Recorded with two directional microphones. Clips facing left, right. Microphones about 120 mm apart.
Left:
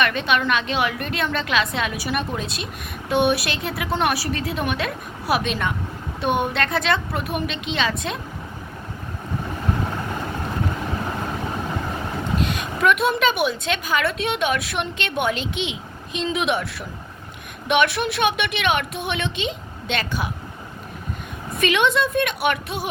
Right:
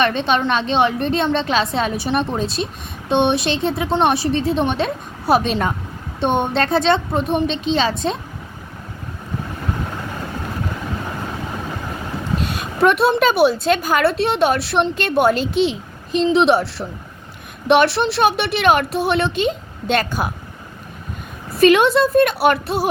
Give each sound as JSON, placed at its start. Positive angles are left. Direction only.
{"t": 0.0, "sound": "a woman's voice", "side_deg": -30}
{"t": 12.4, "sound": "a woman's voice", "side_deg": -40}
{"t": 21.5, "sound": "a woman's voice", "side_deg": -40}